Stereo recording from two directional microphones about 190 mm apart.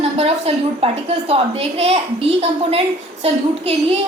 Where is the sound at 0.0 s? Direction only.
30° right (ahead or behind).